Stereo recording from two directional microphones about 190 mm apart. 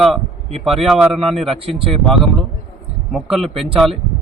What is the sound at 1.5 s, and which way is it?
Speech, 30° right (ahead or behind).